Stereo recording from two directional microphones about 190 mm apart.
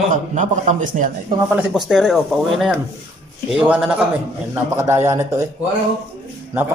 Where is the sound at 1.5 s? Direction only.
5° right (ahead or behind).